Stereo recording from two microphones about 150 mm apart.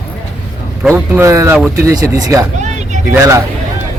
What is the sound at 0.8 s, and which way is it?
Speech, 10° right (ahead or behind).